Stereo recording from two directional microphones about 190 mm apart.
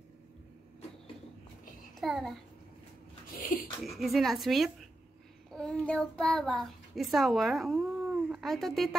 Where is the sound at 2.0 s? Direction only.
Centre (ahead or behind).